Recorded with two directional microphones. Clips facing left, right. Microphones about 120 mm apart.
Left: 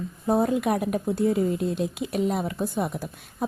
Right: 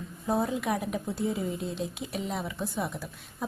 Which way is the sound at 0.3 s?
55° left (ahead or behind).